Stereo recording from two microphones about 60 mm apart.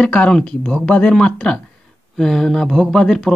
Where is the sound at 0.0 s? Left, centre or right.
Centre.